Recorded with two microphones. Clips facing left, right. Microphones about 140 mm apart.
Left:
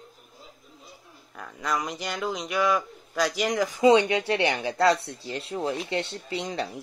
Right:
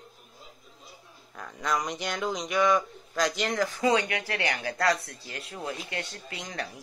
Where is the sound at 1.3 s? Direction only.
Centre (ahead or behind).